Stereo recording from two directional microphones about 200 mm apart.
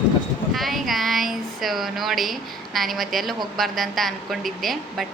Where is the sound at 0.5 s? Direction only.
Centre (ahead or behind).